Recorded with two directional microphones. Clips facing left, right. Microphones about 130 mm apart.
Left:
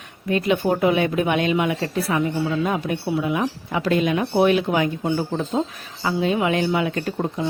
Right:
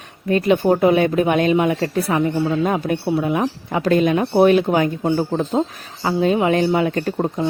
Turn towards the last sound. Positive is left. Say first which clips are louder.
# right 4 dB
turn(degrees=-40)  # may be behind; listen again after turning